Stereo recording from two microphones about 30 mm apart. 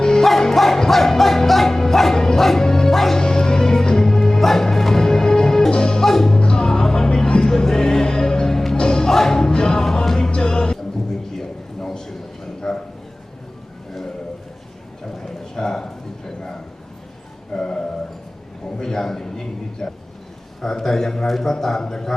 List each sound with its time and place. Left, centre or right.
0.0 s music: left
0.3 s music: centre
2.9 s music: centre
3.2 s music: left
6.4 s music: left
11.3 s a sound: centre
15.0 s a sound: left
21.2 s a man's voice: centre
21.5 s a man's voice: centre